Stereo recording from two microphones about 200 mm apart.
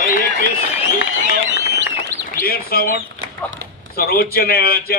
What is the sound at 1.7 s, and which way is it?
Bird, 60° right (ahead or behind).